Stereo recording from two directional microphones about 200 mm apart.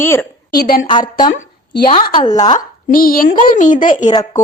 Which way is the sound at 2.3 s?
20° left (ahead or behind).